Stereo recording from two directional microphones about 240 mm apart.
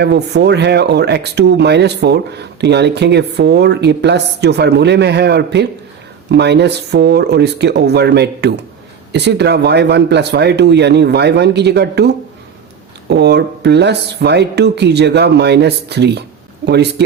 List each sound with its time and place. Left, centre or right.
0.0 s speech: right